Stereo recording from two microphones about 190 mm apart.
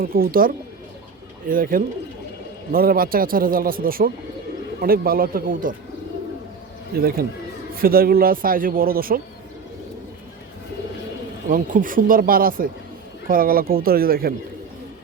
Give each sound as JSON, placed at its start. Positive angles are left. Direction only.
{"t": 0.0, "sound": "speech", "side_deg": -50}
{"t": 6.9, "sound": "speech", "side_deg": -55}
{"t": 11.4, "sound": "speech", "side_deg": -45}